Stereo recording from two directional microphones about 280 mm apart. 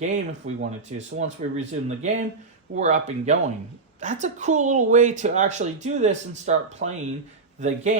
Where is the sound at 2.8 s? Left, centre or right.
Right.